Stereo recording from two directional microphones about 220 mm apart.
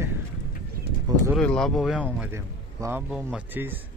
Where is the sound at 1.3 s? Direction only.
5° left (ahead or behind).